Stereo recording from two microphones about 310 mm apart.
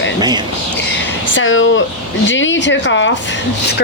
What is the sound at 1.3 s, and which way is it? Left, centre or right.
Speech, left.